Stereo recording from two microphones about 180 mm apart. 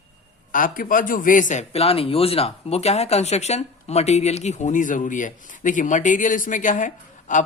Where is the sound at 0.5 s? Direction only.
50° left (ahead or behind).